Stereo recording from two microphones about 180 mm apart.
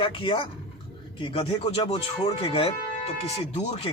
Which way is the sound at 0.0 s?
30° left (ahead or behind).